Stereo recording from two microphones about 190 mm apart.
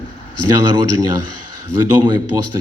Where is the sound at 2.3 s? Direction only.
15° right (ahead or behind).